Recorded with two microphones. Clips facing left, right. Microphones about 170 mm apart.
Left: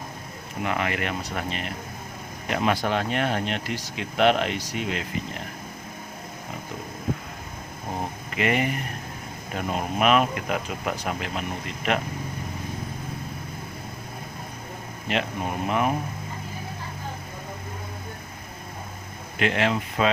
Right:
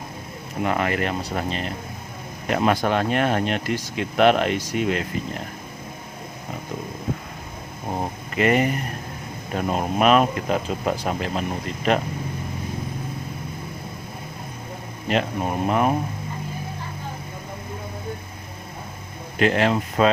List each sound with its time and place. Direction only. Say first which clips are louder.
0.6 s speech: right 4 dB; 40° right (ahead or behind)
2.5 s speech: right 4 dB; 45° right (ahead or behind)
8.4 s speech: right 5 dB; 40° right (ahead or behind)
9.7 s speech: right 3 dB; 40° right (ahead or behind)
15.0 s speech: right 4 dB; 40° right (ahead or behind)
19.4 s speech: right 4 dB; 40° right (ahead or behind)